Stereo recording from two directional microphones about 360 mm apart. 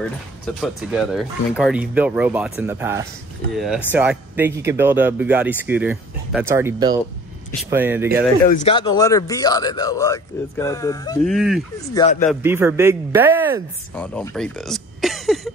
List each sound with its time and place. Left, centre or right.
0.6 s speech: centre
8.5 s speech: centre
11.2 s speech: centre
11.9 s speech: centre
12.3 s speech: centre